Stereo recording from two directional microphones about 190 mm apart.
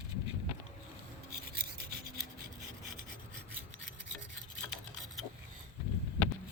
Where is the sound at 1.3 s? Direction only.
55° right (ahead or behind).